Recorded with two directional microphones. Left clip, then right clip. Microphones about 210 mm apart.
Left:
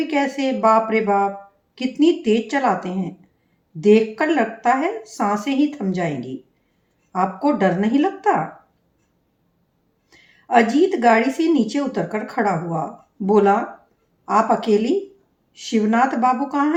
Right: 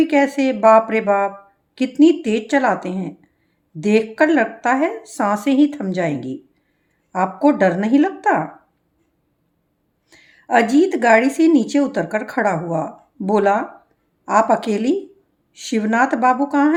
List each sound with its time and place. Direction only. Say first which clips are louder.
0.0 s a woman's voice: right 5 dB; 55° right (ahead or behind)
10.1 s a woman's voice: right 1 dB; 55° right (ahead or behind)